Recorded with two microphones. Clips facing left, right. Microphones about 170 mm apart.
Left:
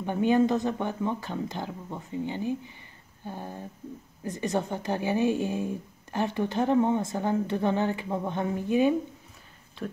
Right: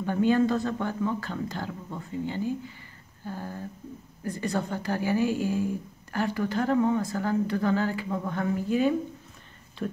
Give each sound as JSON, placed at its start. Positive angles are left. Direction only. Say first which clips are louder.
{"t": 0.0, "sound": "speech", "louder": "even", "side_deg": 20}
{"t": 9.8, "sound": "speech", "louder": "right 3 dB", "side_deg": 0}